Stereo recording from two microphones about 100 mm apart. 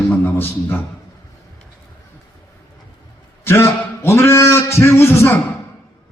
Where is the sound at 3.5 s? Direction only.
25° left (ahead or behind).